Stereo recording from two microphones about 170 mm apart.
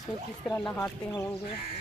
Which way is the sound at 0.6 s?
10° left (ahead or behind).